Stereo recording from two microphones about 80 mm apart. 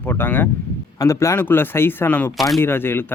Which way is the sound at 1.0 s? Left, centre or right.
Left.